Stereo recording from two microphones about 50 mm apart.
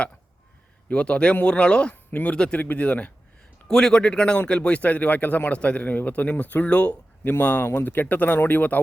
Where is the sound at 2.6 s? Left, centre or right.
Left.